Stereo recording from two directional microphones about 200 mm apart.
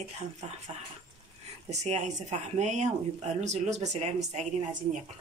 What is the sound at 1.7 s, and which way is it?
Speech, 35° right (ahead or behind).